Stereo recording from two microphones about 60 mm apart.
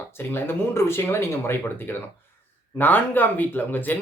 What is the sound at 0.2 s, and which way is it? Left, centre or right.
Speech, left.